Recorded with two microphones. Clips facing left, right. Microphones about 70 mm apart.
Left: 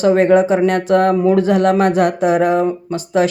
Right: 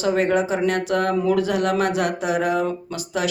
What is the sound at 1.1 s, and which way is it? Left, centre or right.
Speech, left.